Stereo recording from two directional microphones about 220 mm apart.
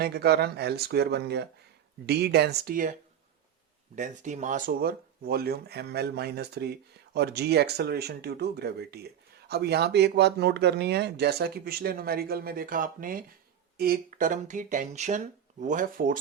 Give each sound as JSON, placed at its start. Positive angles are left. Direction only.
{"t": 0.0, "sound": "speech", "side_deg": -45}
{"t": 3.9, "sound": "speech", "side_deg": -35}